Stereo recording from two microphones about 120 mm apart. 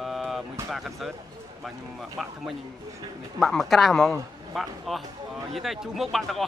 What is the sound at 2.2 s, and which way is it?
Speech, centre (ahead or behind).